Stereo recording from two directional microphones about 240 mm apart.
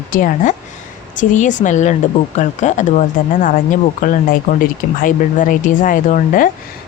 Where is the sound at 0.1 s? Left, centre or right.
Left.